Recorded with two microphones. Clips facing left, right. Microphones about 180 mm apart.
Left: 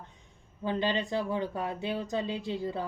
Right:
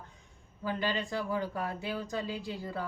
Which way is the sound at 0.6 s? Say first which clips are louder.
Left 3 dB; 25° left (ahead or behind).